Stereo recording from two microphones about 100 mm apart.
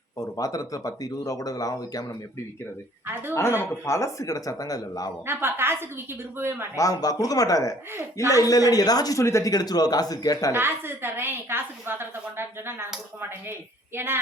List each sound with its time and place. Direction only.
0.2 s a man's voice: 35° left (ahead or behind)
3.1 s a woman's voice: 20° right (ahead or behind)
3.3 s a man's voice: 25° left (ahead or behind)
5.2 s a woman's voice: 20° right (ahead or behind)
6.7 s a man's voice: 35° left (ahead or behind)
10.5 s a woman's voice: 20° right (ahead or behind)
13.9 s a woman's voice: 25° right (ahead or behind)